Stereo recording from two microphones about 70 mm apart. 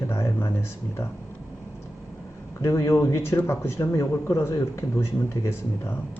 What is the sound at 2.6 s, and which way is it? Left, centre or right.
Speech, left.